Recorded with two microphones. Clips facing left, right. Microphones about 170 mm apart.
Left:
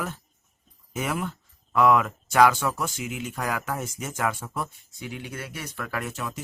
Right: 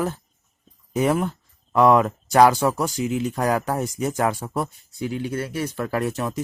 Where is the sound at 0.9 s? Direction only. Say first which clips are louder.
Right 8 dB; 35° right (ahead or behind).